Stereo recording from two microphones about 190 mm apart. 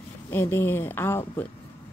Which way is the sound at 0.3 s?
10° left (ahead or behind).